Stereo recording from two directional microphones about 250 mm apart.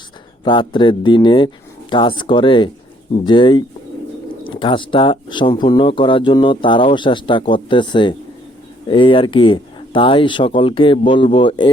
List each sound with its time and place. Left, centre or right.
0.4 s speech: centre